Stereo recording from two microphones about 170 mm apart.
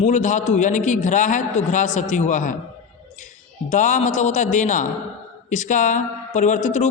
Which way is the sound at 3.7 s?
45° left (ahead or behind).